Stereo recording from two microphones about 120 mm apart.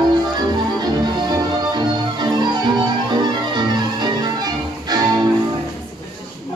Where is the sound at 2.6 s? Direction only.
40° right (ahead or behind).